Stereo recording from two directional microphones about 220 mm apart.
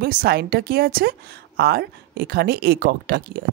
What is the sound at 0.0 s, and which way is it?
A woman's voice, 40° right (ahead or behind).